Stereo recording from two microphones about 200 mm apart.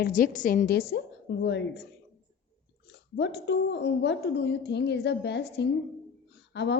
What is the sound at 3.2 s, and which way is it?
A woman's voice, 60° left (ahead or behind).